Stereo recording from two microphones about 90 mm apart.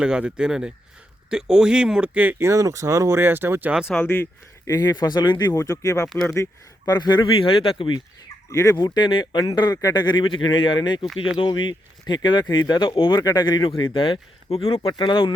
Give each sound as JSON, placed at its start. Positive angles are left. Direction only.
{"t": 0.0, "sound": "speech", "side_deg": -10}
{"t": 2.4, "sound": "speech", "side_deg": -35}
{"t": 3.7, "sound": "speech", "side_deg": -10}
{"t": 4.0, "sound": "speech", "side_deg": 20}
{"t": 4.6, "sound": "speech", "side_deg": 45}
{"t": 6.8, "sound": "speech", "side_deg": 50}
{"t": 9.5, "sound": "speech", "side_deg": 50}
{"t": 11.3, "sound": "speech", "side_deg": 60}
{"t": 12.9, "sound": "speech", "side_deg": 75}
{"t": 13.1, "sound": "speech", "side_deg": 50}
{"t": 14.8, "sound": "speech", "side_deg": 60}